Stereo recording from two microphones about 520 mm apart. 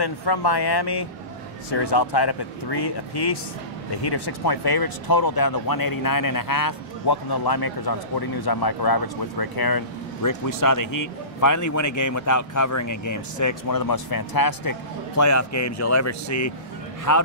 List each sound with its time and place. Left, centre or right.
0.0 s speech: left